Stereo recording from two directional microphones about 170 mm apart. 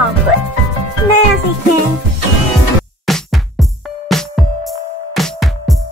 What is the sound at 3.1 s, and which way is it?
Music, centre (ahead or behind).